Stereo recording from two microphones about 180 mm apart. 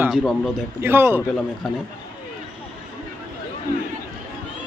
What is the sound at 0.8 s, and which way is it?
Speech, 10° right (ahead or behind).